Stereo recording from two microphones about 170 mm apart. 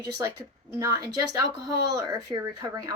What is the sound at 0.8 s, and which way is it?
Speech, 20° right (ahead or behind).